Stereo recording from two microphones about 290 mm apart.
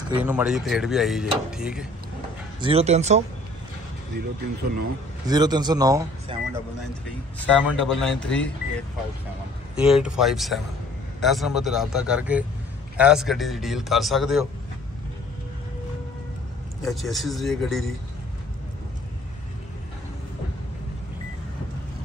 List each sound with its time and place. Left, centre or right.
0.2 s speech: centre
2.6 s speech: right
5.2 s speech: centre
7.3 s speech: centre
16.8 s speech: centre